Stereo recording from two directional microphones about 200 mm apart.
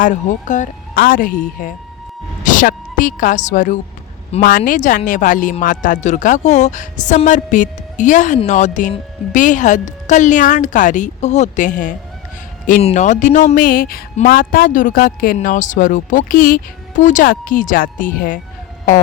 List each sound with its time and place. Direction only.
0.0 s a woman's voice: 40° left (ahead or behind)